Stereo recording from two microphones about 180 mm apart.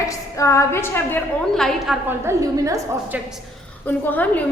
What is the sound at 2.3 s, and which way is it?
Speech, 15° right (ahead or behind).